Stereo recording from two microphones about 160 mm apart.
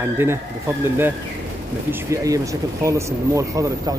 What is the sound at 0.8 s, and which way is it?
Speech, 15° right (ahead or behind).